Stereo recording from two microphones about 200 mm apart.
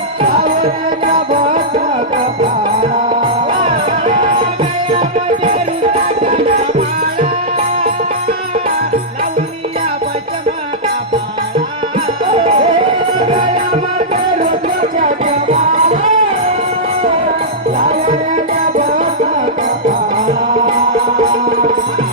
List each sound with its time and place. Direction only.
0.4 s music: 45° right (ahead or behind)
1.0 s music: 25° right (ahead or behind)
1.4 s music: 45° right (ahead or behind)
3.5 s music: 25° right (ahead or behind)
6.3 s music: 45° right (ahead or behind)
12.2 s music: 25° right (ahead or behind)
14.9 s music: 40° right (ahead or behind)
17.8 s music: 40° right (ahead or behind)